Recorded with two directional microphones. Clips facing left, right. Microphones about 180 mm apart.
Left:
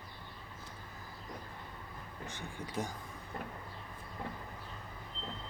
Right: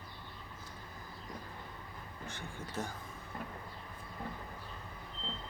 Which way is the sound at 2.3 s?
15° left (ahead or behind).